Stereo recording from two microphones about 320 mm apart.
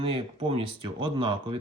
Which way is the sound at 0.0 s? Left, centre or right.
Centre.